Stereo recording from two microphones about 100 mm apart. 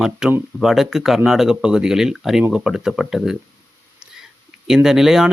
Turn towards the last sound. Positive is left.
turn(degrees=-5)  # may be behind; listen again after turning